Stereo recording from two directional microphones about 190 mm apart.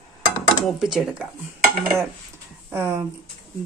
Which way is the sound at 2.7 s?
15° right (ahead or behind).